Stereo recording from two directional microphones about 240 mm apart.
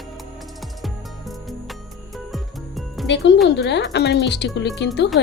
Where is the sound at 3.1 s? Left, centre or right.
Left.